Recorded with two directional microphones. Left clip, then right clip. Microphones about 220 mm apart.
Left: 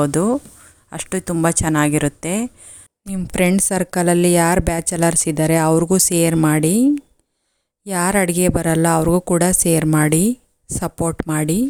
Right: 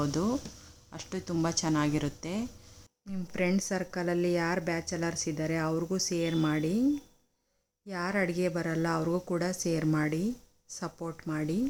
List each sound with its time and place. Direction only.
0.0 s a woman's voice: 35° left (ahead or behind)